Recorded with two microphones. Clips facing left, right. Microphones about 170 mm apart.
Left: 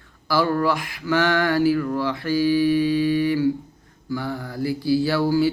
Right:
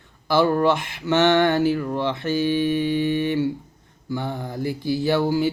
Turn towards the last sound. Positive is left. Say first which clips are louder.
# left 1 dB
turn(degrees=-20)  # may be behind; listen again after turning